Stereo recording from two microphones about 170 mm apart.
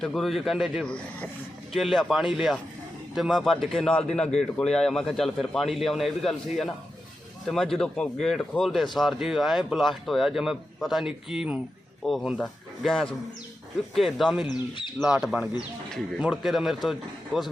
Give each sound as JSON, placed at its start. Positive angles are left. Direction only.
{"t": 0.0, "sound": "speech", "side_deg": 0}
{"t": 14.4, "sound": "speech", "side_deg": 25}
{"t": 14.9, "sound": "speech", "side_deg": 0}